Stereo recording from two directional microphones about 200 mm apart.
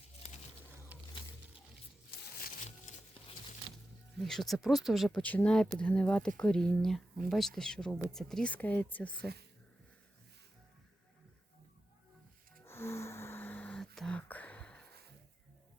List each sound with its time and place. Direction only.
2.6 s music: 35° left (ahead or behind)
4.2 s speech: centre (ahead or behind)
9.1 s speech: 55° right (ahead or behind)
12.6 s gasp: 10° left (ahead or behind)